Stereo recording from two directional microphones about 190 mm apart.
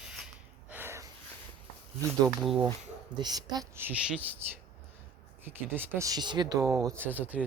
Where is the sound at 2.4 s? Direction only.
Centre (ahead or behind).